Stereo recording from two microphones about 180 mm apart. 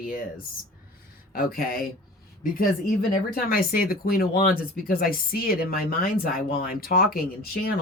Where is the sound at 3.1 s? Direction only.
55° left (ahead or behind).